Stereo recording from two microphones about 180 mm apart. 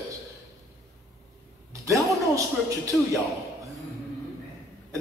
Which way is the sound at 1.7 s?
15° right (ahead or behind).